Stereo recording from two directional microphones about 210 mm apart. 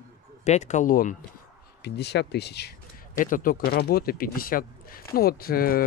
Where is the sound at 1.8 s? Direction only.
55° left (ahead or behind).